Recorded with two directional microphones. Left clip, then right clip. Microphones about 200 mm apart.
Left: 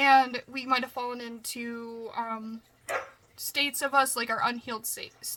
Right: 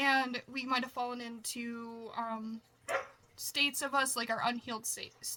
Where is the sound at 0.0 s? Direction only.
20° left (ahead or behind).